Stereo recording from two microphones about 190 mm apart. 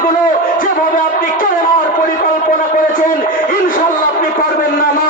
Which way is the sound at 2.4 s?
45° left (ahead or behind).